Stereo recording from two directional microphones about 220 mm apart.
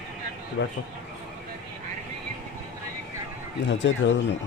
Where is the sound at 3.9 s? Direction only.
55° left (ahead or behind).